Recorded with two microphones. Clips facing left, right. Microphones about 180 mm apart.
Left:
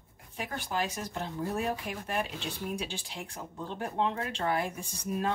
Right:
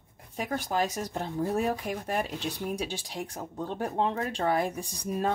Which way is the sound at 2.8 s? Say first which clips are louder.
Right 4 dB; 40° right (ahead or behind).